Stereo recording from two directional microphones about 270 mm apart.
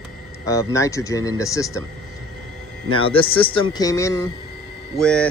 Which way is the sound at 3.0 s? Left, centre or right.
Centre.